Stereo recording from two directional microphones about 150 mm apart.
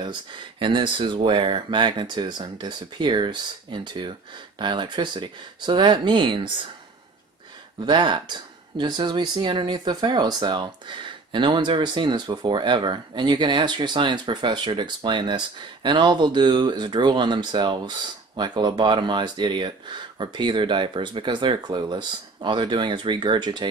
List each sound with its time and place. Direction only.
0.0 s speech: 30° right (ahead or behind)
7.8 s speech: 30° right (ahead or behind)